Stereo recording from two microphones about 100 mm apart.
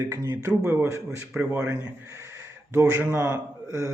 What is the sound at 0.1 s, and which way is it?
Speech, 30° right (ahead or behind).